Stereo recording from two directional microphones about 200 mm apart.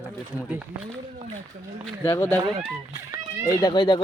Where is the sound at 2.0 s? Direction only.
15° left (ahead or behind).